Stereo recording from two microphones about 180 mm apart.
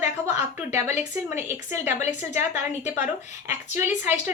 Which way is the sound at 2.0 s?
40° left (ahead or behind).